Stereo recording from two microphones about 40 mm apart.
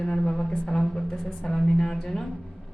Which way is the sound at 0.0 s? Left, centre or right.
Centre.